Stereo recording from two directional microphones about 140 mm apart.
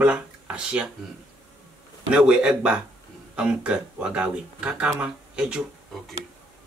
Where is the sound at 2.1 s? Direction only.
5° right (ahead or behind).